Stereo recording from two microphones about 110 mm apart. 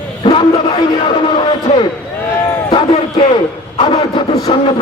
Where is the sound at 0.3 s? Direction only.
45° left (ahead or behind).